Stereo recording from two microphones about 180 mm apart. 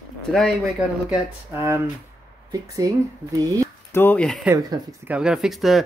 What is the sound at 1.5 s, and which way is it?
Speech, 15° right (ahead or behind).